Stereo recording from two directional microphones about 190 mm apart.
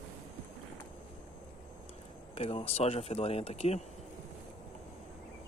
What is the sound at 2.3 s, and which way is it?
Speech, 30° left (ahead or behind).